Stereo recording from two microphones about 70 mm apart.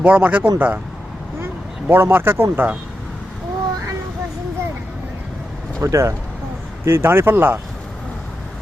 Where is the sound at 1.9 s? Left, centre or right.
Right.